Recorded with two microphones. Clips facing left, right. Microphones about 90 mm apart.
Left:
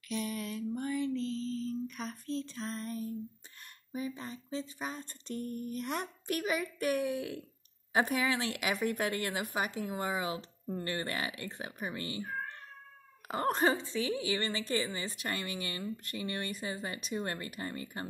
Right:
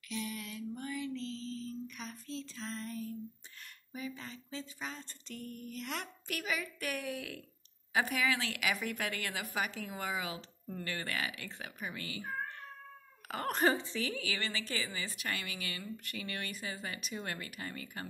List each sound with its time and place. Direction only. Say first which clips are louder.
0.1 s a sound: left 5 dB; 40° left (ahead or behind)
4.8 s a woman's voice: left 4 dB; 40° left (ahead or behind); by 7.4 s 25° left (ahead or behind)
7.9 s a woman's voice: left 2 dB; 35° left (ahead or behind)
13.3 s a woman's voice: left 2 dB; 30° left (ahead or behind)